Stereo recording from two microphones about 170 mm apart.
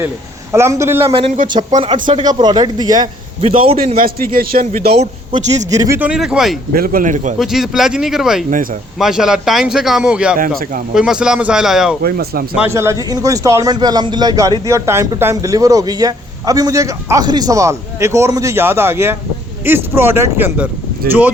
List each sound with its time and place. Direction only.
0.5 s speech: 15° right (ahead or behind)
1.4 s speech: 55° right (ahead or behind)
2.0 s a man's voice: 25° right (ahead or behind)
3.4 s a man's voice: 35° right (ahead or behind)
3.9 s a man's voice: 60° right (ahead or behind)
4.9 s a man's voice: 40° right (ahead or behind)
5.7 s a man's voice: 20° right (ahead or behind)
6.0 s a man's voice: 5° right (ahead or behind)
6.7 s speech: 55° right (ahead or behind)
7.3 s a man's voice: centre (ahead or behind)
10.6 s speech: 55° right (ahead or behind)
10.9 s a man's voice: 5° right (ahead or behind)
12.0 s a man's voice: 65° right (ahead or behind)
12.5 s a man's voice: 15° right (ahead or behind)